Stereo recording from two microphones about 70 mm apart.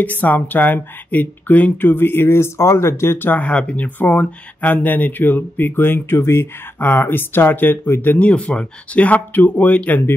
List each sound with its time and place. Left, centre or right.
0.0 s speech: left
3.3 s speech: left
8.3 s speech: centre